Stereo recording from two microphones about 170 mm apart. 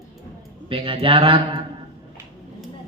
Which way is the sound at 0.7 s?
30° right (ahead or behind).